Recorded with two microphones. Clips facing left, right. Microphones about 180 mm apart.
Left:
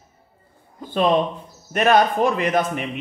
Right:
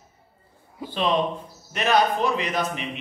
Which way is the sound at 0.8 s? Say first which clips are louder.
Left 4 dB; 50° left (ahead or behind).